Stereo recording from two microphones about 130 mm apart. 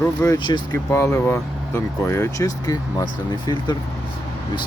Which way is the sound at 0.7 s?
20° left (ahead or behind).